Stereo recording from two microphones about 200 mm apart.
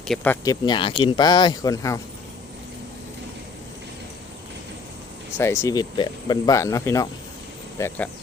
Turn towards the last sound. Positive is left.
turn(degrees=15)  # may be behind; listen again after turning